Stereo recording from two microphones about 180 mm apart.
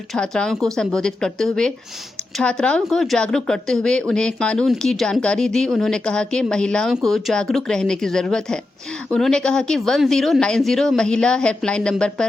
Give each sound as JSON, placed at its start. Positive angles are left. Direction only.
{"t": 0.1, "sound": "speech", "side_deg": 5}